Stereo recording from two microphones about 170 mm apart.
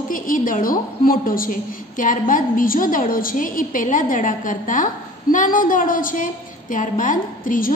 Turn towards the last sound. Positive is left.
turn(degrees=55)  # may be behind; listen again after turning